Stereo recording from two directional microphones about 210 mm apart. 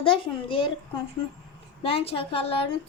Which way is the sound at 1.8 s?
25° left (ahead or behind).